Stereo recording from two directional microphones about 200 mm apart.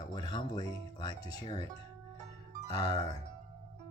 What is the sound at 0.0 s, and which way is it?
Music, 20° left (ahead or behind).